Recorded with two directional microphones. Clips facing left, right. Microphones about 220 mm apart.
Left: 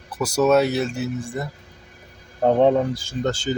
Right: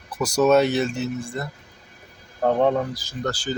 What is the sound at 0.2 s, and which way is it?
Speech, 5° left (ahead or behind).